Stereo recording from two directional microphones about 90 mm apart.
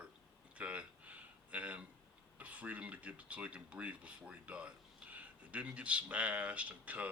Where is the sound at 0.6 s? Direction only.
15° right (ahead or behind).